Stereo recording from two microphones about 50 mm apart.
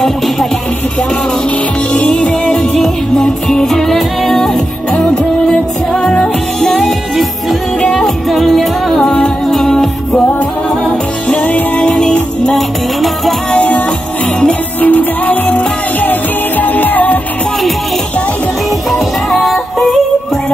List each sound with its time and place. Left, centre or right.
2.0 s music: left
11.4 s music: left
11.9 s music: centre
12.5 s music: centre
13.5 s music: left
18.9 s music: centre